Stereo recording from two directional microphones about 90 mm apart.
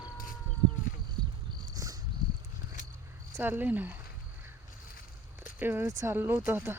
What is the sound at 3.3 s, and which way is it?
Speech, 25° right (ahead or behind).